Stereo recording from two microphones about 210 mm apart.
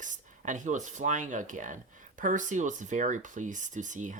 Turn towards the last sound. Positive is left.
turn(degrees=-35)  # may be behind; listen again after turning